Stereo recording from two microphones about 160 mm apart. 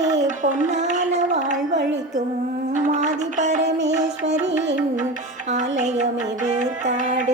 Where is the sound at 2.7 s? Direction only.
50° right (ahead or behind).